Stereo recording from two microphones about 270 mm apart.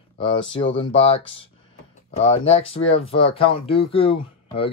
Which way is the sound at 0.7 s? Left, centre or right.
Left.